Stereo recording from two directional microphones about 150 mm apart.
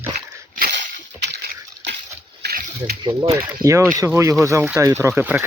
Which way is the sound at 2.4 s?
90° right.